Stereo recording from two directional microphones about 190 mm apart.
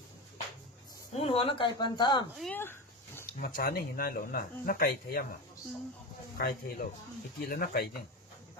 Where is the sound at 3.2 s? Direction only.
50° left (ahead or behind).